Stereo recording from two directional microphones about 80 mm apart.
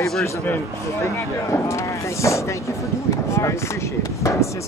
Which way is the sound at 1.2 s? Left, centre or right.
Left.